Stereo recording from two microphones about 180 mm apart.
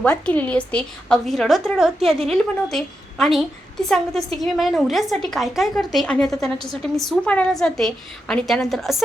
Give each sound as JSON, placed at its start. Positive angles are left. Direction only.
{"t": 0.0, "sound": "a woman's voice", "side_deg": 5}